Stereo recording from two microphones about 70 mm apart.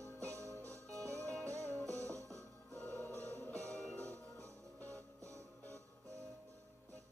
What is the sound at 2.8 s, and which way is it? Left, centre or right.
Music, left.